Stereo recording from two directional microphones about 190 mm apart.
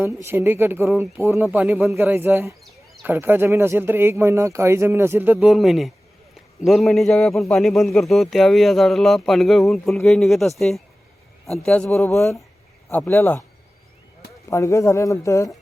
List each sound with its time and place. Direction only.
0.0 s speech: 15° right (ahead or behind)
2.6 s a sound: centre (ahead or behind)
3.1 s a man's voice: 10° right (ahead or behind); by 13.4 s 10° left (ahead or behind)
14.5 s speech: 15° left (ahead or behind)